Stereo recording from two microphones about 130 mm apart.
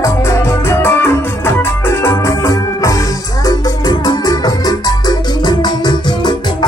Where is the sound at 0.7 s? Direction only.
20° left (ahead or behind).